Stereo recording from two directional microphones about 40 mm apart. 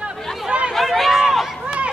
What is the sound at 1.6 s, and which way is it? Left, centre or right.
Run, right.